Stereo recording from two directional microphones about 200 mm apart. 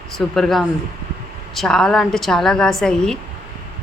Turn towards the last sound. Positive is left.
turn(degrees=5)  # may be behind; listen again after turning